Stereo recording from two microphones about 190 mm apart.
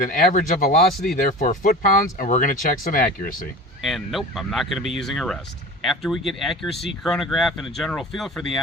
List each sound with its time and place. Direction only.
0.0 s speech: 45° left (ahead or behind)
3.8 s speech: centre (ahead or behind)